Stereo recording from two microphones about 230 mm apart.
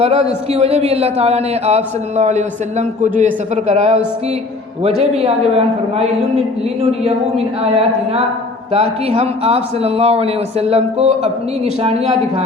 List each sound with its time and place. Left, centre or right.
0.0 s speech: right
8.7 s speech: right